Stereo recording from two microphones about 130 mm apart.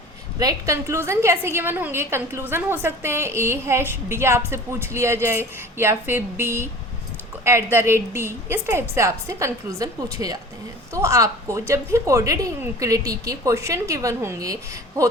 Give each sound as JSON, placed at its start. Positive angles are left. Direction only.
{"t": 0.3, "sound": "a woman's voice", "side_deg": -25}